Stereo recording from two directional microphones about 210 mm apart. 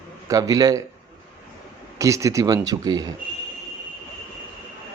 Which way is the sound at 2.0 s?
15° right (ahead or behind).